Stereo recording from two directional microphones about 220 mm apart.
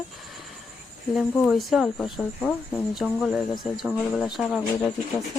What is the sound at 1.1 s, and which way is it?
Speech, centre (ahead or behind).